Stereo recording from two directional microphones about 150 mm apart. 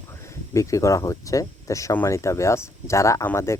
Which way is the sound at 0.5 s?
20° left (ahead or behind).